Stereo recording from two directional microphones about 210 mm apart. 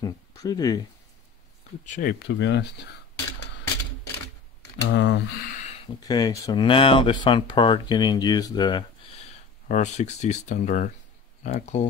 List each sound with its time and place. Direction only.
0.0 s speech: 15° left (ahead or behind)
1.9 s speech: 40° left (ahead or behind)
4.8 s speech: 55° left (ahead or behind)
5.5 s a sound: 35° left (ahead or behind)
6.0 s speech: 15° left (ahead or behind)
9.7 s speech: 35° left (ahead or behind)